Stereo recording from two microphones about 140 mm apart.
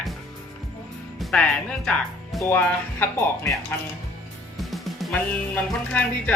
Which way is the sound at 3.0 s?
20° left (ahead or behind).